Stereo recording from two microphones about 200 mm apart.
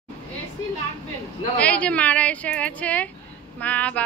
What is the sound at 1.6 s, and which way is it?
A woman's voice, 5° left (ahead or behind).